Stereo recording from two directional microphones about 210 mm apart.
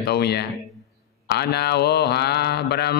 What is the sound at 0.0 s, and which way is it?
Mantra, 50° left (ahead or behind).